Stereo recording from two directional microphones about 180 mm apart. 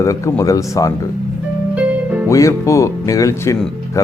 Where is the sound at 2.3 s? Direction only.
15° left (ahead or behind).